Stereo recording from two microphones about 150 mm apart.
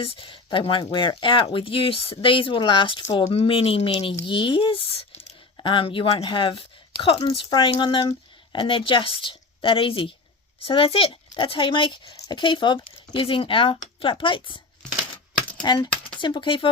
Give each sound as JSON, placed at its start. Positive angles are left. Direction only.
{"t": 0.0, "sound": "a woman's voice", "side_deg": 35}
{"t": 15.6, "sound": "a woman's voice", "side_deg": 30}